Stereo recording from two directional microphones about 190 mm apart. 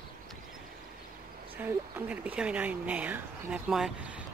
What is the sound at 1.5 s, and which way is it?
Speech, 10° right (ahead or behind).